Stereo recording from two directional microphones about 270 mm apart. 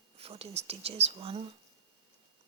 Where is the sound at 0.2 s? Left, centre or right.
Right.